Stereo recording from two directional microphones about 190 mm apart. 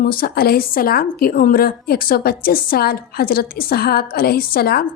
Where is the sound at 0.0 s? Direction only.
50° left (ahead or behind).